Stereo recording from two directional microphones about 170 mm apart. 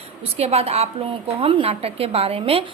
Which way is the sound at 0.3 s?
35° right (ahead or behind).